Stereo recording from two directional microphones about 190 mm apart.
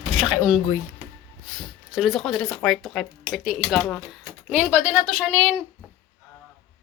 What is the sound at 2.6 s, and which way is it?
A woman's voice, centre (ahead or behind).